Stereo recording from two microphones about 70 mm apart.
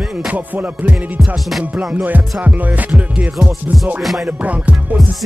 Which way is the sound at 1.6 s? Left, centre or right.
Centre.